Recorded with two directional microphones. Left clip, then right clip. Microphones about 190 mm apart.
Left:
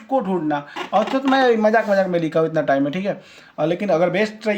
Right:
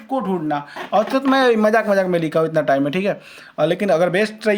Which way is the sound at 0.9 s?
30° right (ahead or behind).